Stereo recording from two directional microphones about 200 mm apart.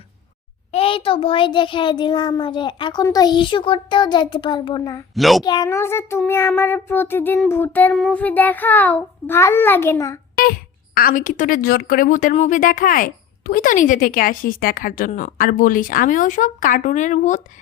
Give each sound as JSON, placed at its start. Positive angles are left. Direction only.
{"t": 0.7, "sound": "a child's voice", "side_deg": 25}
{"t": 5.1, "sound": "a child's voice", "side_deg": 0}
{"t": 5.4, "sound": "a child's voice", "side_deg": 20}
{"t": 10.9, "sound": "a woman's voice", "side_deg": 45}